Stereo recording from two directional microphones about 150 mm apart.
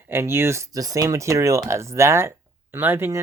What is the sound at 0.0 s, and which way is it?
Speech, 15° right (ahead or behind).